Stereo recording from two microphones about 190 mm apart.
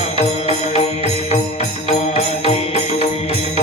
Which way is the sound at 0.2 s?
35° left (ahead or behind).